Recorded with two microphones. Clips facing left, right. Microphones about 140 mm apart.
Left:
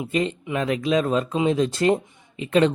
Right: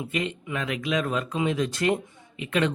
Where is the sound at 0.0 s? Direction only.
35° left (ahead or behind).